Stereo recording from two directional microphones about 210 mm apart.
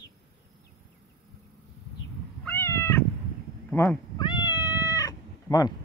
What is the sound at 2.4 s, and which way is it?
Cat, 10° left (ahead or behind).